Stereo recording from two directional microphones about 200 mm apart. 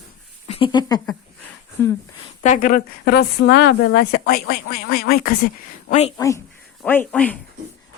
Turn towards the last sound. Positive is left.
turn(degrees=10)  # may be behind; listen again after turning